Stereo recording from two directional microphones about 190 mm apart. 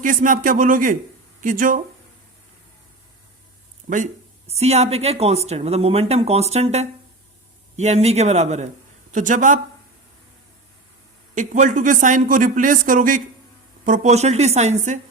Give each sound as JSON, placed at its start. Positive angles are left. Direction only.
{"t": 0.0, "sound": "speech", "side_deg": -45}
{"t": 3.8, "sound": "speech", "side_deg": -40}
{"t": 11.3, "sound": "speech", "side_deg": -40}